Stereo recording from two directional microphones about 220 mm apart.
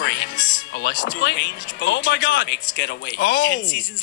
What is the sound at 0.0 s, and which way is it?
Music, 55° left (ahead or behind).